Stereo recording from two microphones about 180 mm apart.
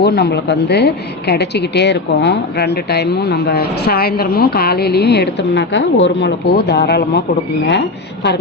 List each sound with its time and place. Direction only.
0.0 s a woman's voice: 65° left (ahead or behind)